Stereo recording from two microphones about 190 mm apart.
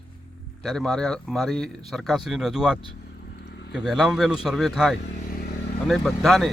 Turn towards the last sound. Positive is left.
turn(degrees=0)  # may be behind; listen again after turning